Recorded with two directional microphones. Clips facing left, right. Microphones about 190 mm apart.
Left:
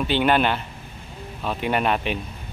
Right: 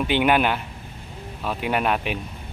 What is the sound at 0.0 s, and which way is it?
Speech, 10° right (ahead or behind).